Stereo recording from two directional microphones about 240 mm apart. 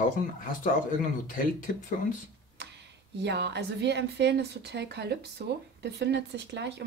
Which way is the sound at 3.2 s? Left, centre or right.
Right.